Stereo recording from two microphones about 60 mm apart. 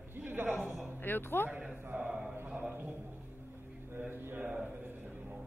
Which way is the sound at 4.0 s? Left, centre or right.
Right.